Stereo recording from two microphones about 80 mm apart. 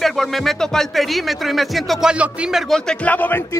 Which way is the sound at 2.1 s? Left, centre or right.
Centre.